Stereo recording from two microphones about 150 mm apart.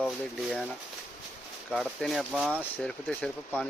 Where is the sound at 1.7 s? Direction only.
Centre (ahead or behind).